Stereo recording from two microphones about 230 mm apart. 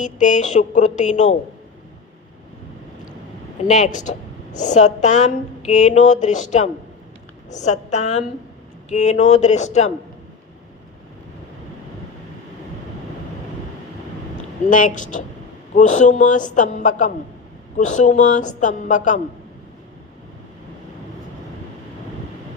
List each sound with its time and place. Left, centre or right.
0.0 s speech: left
3.7 s speech: left
14.7 s speech: left